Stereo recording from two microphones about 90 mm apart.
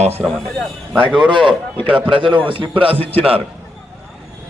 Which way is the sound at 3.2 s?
15° right (ahead or behind).